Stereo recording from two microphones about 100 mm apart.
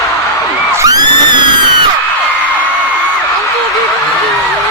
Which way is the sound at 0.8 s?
35° right (ahead or behind).